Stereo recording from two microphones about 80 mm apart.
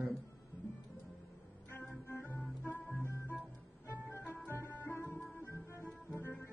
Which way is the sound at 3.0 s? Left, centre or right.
Left.